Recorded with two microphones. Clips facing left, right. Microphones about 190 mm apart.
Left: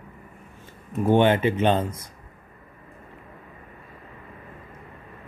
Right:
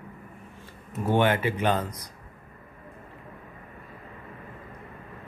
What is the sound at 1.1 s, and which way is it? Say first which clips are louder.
Speech: left 5 dB; 25° left (ahead or behind).